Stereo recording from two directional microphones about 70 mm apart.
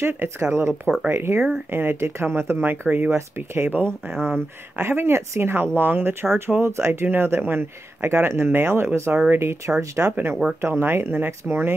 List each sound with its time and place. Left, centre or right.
0.0 s speech: right
10.1 s speech: right